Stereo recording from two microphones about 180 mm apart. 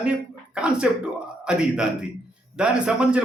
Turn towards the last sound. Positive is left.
turn(degrees=-5)  # may be behind; listen again after turning